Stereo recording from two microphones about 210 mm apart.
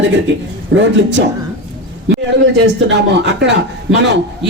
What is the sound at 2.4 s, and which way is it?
A man's voice, 55° right (ahead or behind).